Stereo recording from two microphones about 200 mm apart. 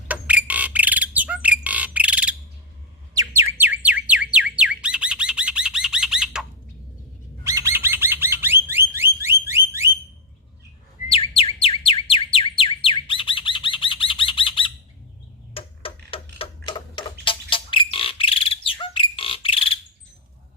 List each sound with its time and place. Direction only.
0.1 s bird: 5° right (ahead or behind)
7.4 s bird: 15° right (ahead or behind)
11.1 s bird: 30° left (ahead or behind)
15.5 s a sound: 25° left (ahead or behind)